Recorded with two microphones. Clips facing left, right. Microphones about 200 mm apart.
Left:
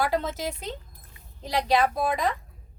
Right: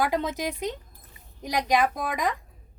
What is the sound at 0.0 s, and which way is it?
A woman's voice, 15° right (ahead or behind).